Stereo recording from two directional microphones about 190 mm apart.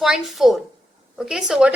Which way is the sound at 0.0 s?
Centre (ahead or behind).